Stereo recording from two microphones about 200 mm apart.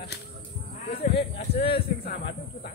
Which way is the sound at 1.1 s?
25° left (ahead or behind).